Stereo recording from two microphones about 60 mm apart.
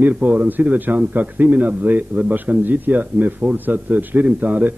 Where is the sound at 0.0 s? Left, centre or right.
Right.